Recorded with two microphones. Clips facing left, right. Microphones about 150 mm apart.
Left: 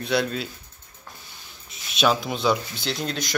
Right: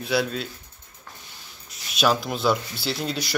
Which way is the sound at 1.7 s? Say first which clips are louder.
Even; centre (ahead or behind).